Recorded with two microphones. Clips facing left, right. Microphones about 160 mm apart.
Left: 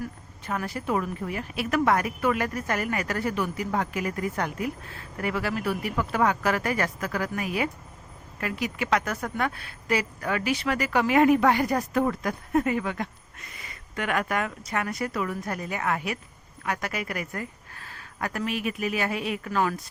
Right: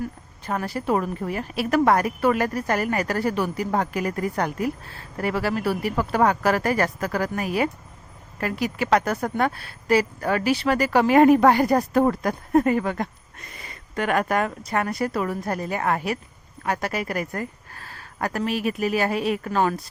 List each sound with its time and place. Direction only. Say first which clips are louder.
0.0 s speech: right 4 dB; 35° right (ahead or behind)